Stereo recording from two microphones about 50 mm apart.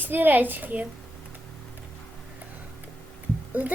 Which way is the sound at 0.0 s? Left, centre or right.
Right.